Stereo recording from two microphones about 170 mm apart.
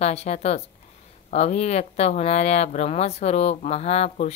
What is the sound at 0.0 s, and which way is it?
Speech, 40° left (ahead or behind).